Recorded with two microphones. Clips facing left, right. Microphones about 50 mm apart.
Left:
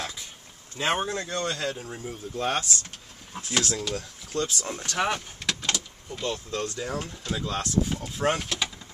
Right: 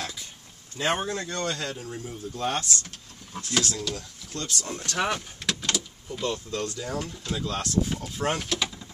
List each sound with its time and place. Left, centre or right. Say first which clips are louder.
0.7 s speech: even; centre
6.7 s speech: even; left
7.2 s speech: left 2 dB; centre